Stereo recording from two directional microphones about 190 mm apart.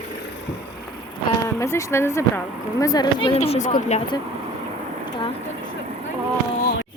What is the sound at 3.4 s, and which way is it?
Speech, 35° left (ahead or behind).